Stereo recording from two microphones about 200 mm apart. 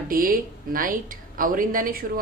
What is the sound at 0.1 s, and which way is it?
Speech, 45° right (ahead or behind).